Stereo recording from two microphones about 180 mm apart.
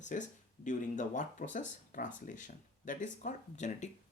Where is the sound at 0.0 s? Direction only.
45° left (ahead or behind).